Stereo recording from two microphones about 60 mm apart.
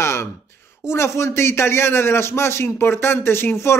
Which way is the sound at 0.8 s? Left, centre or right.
Left.